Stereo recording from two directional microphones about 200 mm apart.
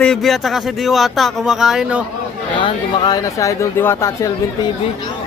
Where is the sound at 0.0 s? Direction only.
Centre (ahead or behind).